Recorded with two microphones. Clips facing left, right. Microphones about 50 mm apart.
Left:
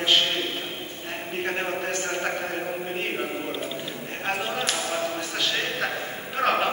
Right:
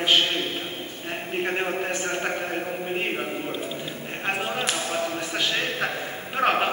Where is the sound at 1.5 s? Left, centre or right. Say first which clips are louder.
Right 2 dB; centre.